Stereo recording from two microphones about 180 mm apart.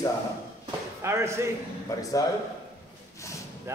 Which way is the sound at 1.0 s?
15° right (ahead or behind).